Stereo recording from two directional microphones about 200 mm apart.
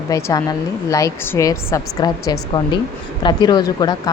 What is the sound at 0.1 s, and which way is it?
A woman's voice, 15° left (ahead or behind).